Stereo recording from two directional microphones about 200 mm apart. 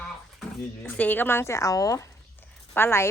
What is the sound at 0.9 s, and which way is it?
A woman's voice, 10° left (ahead or behind).